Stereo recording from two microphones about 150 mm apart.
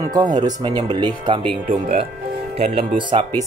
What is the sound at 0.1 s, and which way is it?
Speech, 25° right (ahead or behind).